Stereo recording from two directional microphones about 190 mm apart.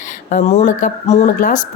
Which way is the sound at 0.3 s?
40° left (ahead or behind).